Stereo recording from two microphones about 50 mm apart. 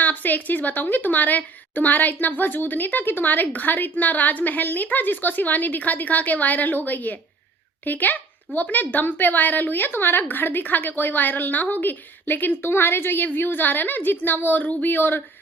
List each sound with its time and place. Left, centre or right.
0.0 s speech: left